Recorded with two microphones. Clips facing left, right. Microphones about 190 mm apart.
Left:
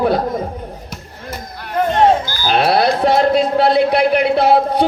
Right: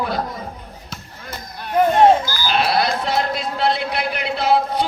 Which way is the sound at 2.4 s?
50° left (ahead or behind).